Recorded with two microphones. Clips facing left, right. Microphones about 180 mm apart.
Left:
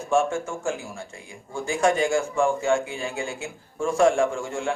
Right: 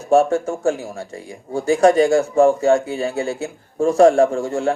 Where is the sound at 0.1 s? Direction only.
40° right (ahead or behind).